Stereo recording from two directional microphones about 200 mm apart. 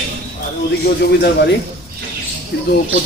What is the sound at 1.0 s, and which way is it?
Speech, 55° left (ahead or behind).